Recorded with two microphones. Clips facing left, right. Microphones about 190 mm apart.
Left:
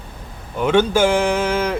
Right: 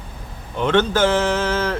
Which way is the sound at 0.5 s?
10° left (ahead or behind).